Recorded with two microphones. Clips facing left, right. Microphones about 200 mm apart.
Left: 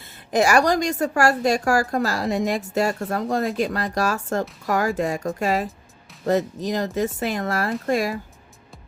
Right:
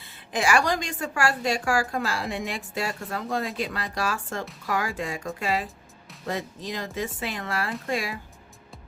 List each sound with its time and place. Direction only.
0.0 s a woman's voice: 40° left (ahead or behind)